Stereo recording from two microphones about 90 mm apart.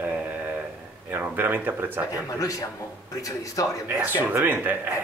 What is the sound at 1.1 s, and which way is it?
Speech, 20° right (ahead or behind).